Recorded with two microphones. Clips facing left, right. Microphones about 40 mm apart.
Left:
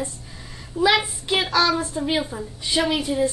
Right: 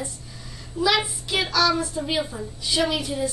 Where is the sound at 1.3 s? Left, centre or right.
Left.